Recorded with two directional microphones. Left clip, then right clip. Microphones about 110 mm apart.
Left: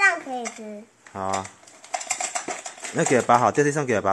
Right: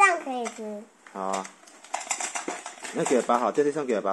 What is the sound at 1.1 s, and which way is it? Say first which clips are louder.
Speech: left 3 dB; 15° left (ahead or behind).